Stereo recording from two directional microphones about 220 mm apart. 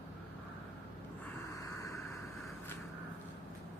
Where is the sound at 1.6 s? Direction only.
15° left (ahead or behind).